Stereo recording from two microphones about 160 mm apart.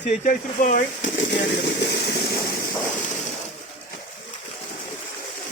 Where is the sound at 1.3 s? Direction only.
90° left.